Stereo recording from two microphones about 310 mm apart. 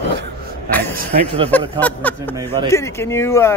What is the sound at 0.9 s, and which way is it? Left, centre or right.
Speech, centre.